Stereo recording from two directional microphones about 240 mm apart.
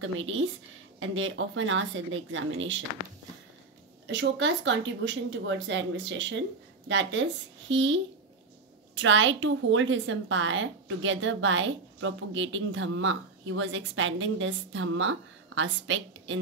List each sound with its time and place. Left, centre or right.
0.9 s speech: right
4.1 s a child's voice: right